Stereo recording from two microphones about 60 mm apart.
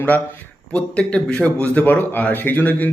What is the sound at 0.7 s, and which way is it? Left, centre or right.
A man's voice, centre.